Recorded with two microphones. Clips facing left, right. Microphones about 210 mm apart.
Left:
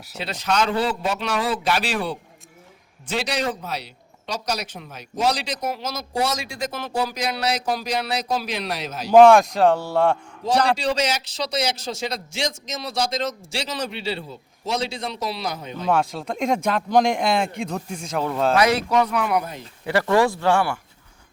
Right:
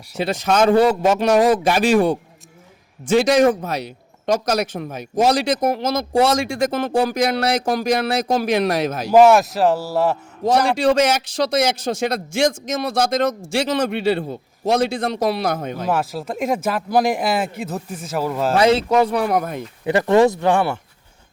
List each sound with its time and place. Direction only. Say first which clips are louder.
0.2 s a man's voice: right 6 dB; 50° right (ahead or behind)
3.2 s a man's voice: right 11 dB; 50° right (ahead or behind)
9.1 s speech: even; 5° right (ahead or behind)
10.4 s a man's voice: right 5 dB; 55° right (ahead or behind)
15.9 s speech: left 1 dB; 5° right (ahead or behind)
18.5 s speech: right 5 dB; 25° right (ahead or behind); by 19.6 s 50° right (ahead or behind)
19.8 s speech: right 5 dB; 20° right (ahead or behind)